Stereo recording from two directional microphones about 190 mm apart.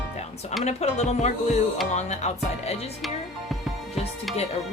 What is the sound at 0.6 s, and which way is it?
Music, 35° left (ahead or behind).